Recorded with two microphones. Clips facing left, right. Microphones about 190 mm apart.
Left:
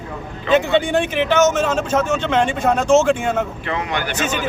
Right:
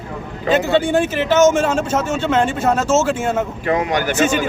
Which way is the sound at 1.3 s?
10° right (ahead or behind).